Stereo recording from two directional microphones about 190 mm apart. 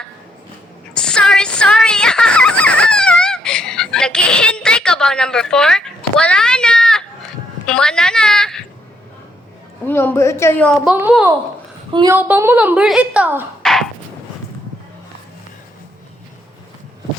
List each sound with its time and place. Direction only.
0.9 s a sound: 5° left (ahead or behind)
7.7 s a woman's voice: 5° left (ahead or behind)
9.8 s a woman's voice: 10° left (ahead or behind)
10.9 s a woman's voice: 10° right (ahead or behind)
11.9 s a woman's voice: 25° right (ahead or behind)
12.1 s a woman's voice: 10° right (ahead or behind)
13.6 s beatboxing: centre (ahead or behind)